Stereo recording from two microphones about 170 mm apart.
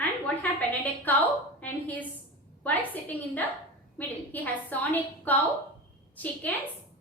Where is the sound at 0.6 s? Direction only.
10° left (ahead or behind).